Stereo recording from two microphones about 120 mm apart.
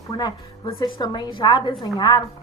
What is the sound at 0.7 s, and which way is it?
A woman's voice, 45° left (ahead or behind).